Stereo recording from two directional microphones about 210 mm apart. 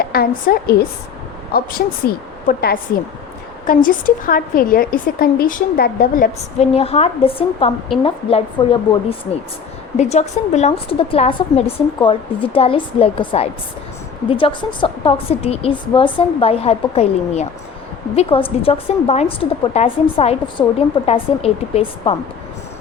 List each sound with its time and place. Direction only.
0.0 s a woman's voice: 45° left (ahead or behind)
6.7 s a woman's voice: 30° left (ahead or behind)